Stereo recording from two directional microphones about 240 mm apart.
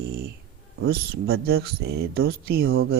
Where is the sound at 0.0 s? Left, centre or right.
Right.